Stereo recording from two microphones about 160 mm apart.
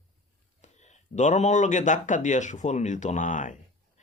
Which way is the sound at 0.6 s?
45° left (ahead or behind).